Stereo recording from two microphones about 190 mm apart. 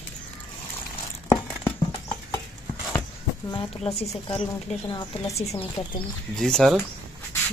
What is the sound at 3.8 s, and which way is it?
A woman's voice, 35° left (ahead or behind).